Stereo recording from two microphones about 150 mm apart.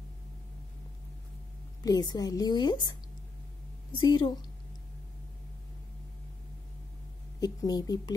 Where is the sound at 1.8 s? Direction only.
25° left (ahead or behind).